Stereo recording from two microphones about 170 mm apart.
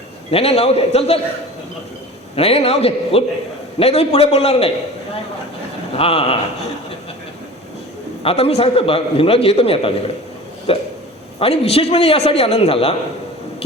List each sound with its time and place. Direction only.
0.3 s a man's voice: 35° left (ahead or behind)
2.3 s a man's voice: 35° left (ahead or behind)
6.0 s a man's voice: 35° left (ahead or behind)
8.2 s a man's voice: 35° left (ahead or behind)
13.6 s a sound: 35° left (ahead or behind)